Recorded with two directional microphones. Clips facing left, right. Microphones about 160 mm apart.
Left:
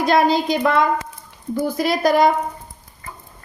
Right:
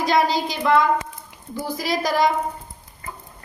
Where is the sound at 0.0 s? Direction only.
55° left (ahead or behind).